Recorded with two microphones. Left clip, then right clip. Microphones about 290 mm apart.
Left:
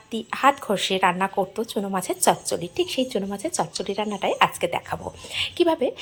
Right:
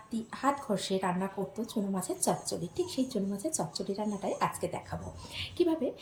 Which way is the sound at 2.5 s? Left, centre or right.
Centre.